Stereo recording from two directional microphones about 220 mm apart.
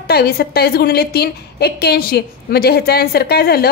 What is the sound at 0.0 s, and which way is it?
A woman's voice, 45° left (ahead or behind).